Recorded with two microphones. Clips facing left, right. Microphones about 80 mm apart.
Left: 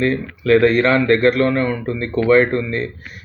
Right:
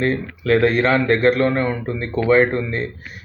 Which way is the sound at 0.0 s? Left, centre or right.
Centre.